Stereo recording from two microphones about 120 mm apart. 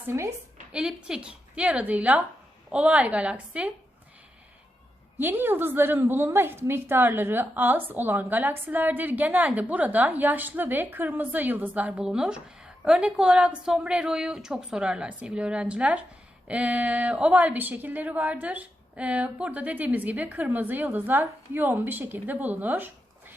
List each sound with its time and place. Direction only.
0.1 s a woman's voice: 25° right (ahead or behind)
0.7 s a woman's voice: 5° right (ahead or behind)
5.1 s a woman's voice: 15° right (ahead or behind)